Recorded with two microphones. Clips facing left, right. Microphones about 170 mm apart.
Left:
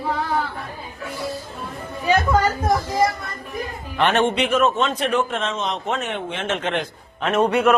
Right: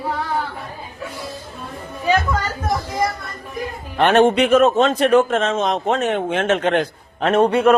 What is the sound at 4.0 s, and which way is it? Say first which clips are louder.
A man's voice: right 5 dB; 40° right (ahead or behind).